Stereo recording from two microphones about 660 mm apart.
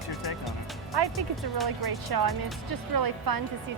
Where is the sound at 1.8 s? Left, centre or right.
Right.